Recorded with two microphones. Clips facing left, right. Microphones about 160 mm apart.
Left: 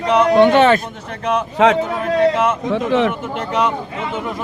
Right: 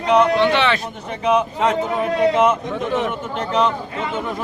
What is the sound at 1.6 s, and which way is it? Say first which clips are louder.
Speech: left 4 dB; 90° left.